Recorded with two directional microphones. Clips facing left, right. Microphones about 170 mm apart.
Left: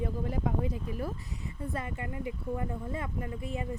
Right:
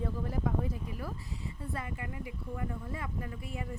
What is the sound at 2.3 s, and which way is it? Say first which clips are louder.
Speech: left 6 dB; 25° left (ahead or behind).